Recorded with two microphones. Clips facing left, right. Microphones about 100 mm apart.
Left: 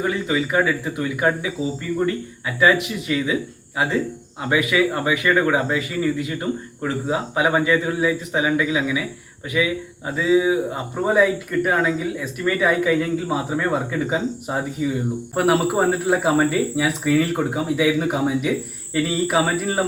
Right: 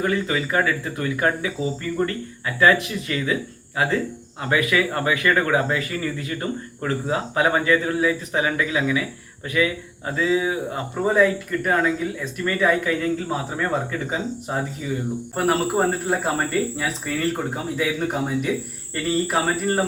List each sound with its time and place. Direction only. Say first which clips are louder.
0.0 s speech: left 1 dB; 10° left (ahead or behind)